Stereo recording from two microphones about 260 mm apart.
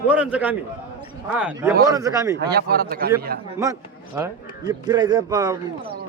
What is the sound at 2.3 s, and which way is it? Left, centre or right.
Speech, right.